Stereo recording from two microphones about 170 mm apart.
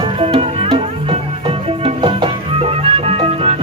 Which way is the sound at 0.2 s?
35° right (ahead or behind).